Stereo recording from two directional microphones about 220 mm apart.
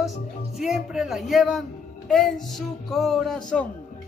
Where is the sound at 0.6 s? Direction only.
Centre (ahead or behind).